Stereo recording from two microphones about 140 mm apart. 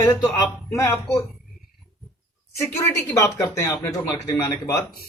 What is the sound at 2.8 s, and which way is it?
Speech, 20° left (ahead or behind).